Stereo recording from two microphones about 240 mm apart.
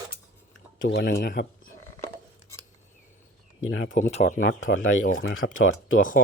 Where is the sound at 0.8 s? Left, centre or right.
Left.